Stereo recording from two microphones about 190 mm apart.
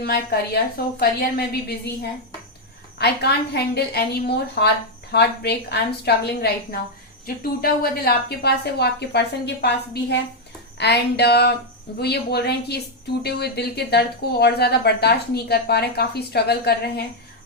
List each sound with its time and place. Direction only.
0.0 s speech: 55° left (ahead or behind)